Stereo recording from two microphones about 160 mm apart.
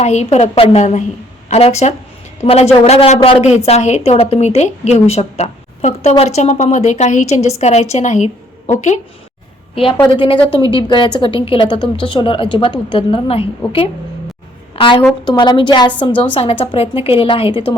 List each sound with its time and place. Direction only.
0.0 s a woman's voice: 45° left (ahead or behind)
9.7 s a woman's voice: 35° left (ahead or behind)
14.8 s a woman's voice: 35° left (ahead or behind)